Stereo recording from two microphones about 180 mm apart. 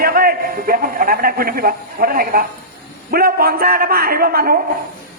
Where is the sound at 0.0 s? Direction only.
55° right (ahead or behind).